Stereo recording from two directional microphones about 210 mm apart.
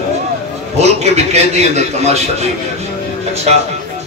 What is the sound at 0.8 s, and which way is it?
A man's voice, 30° right (ahead or behind).